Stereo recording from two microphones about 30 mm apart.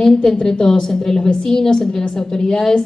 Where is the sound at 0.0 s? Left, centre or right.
Centre.